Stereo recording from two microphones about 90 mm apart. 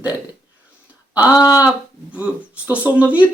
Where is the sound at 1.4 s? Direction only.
40° left (ahead or behind).